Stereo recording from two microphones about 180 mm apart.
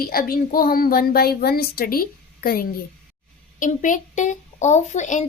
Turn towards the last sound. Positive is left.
turn(degrees=40)  # may be behind; listen again after turning